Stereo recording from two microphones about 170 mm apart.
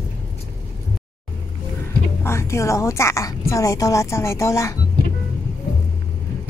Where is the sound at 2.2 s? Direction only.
15° left (ahead or behind).